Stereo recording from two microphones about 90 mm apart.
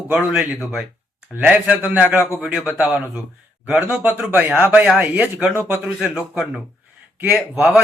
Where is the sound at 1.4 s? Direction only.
15° right (ahead or behind).